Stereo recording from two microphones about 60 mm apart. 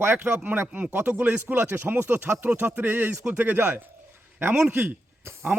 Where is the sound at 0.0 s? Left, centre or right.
Right.